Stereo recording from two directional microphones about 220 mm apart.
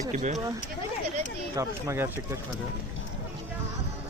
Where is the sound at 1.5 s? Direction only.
10° right (ahead or behind).